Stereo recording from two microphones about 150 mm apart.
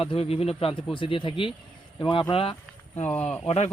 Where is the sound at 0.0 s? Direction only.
40° left (ahead or behind).